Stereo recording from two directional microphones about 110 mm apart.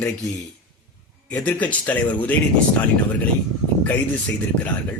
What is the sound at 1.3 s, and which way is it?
Speech, 15° left (ahead or behind).